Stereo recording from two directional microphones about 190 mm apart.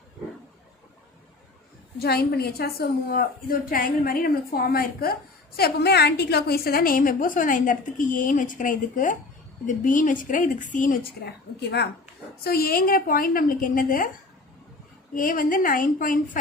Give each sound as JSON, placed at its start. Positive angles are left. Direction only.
{"t": 2.0, "sound": "a woman's voice", "side_deg": 55}
{"t": 12.4, "sound": "a woman's voice", "side_deg": 55}
{"t": 15.1, "sound": "a woman's voice", "side_deg": 45}